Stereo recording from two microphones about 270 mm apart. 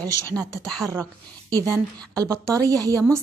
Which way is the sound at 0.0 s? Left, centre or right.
Right.